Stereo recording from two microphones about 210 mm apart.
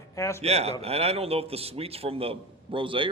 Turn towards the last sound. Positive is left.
turn(degrees=-25)  # may be behind; listen again after turning